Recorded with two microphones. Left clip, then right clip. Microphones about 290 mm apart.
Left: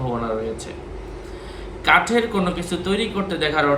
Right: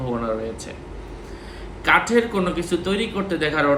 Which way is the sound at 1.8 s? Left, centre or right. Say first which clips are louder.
Left 1 dB; centre.